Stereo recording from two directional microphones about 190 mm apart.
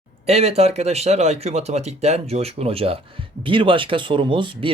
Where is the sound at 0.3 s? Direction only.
35° right (ahead or behind).